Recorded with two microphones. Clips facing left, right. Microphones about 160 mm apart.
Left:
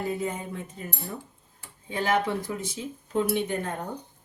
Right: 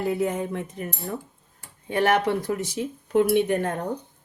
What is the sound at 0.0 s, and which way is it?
Speech, 75° right (ahead or behind).